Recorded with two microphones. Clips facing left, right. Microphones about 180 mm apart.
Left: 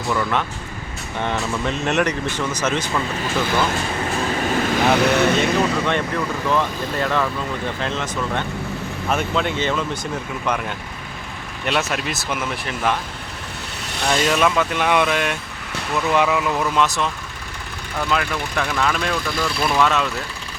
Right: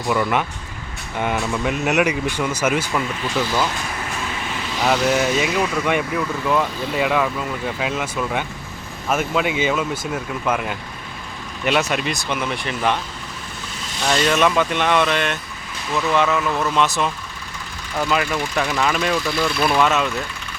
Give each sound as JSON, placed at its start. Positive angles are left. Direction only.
{"t": 0.1, "sound": "speech", "side_deg": -10}
{"t": 4.4, "sound": "vehicle", "side_deg": 45}
{"t": 5.4, "sound": "speech", "side_deg": -10}
{"t": 13.8, "sound": "vehicle", "side_deg": 65}
{"t": 14.1, "sound": "speech", "side_deg": 5}
{"t": 18.1, "sound": "speech", "side_deg": -5}